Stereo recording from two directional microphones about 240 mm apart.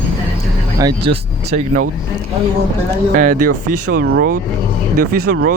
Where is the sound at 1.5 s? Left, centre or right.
Right.